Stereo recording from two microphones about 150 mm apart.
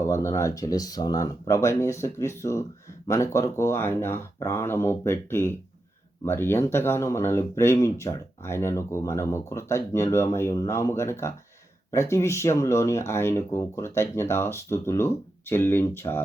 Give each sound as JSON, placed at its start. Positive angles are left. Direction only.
{"t": 0.0, "sound": "speech", "side_deg": 20}